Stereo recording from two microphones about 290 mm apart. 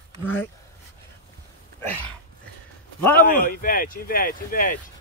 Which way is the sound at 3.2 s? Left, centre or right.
Left.